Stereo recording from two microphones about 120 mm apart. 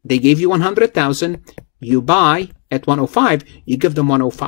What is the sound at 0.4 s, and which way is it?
Speech, 15° left (ahead or behind).